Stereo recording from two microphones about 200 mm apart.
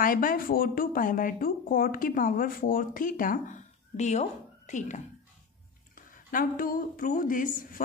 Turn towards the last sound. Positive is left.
turn(degrees=40)  # may be behind; listen again after turning